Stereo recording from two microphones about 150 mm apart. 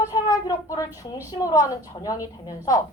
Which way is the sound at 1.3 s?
25° left (ahead or behind).